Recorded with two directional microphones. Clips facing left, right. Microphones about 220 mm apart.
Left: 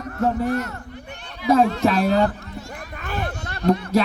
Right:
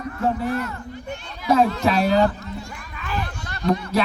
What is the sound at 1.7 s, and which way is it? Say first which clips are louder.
Speech: left 1 dB; 45° left (ahead or behind).